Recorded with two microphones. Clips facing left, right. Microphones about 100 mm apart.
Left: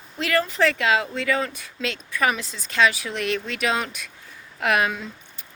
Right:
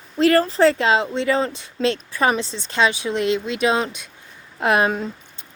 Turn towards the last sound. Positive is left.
turn(degrees=-35)  # may be behind; listen again after turning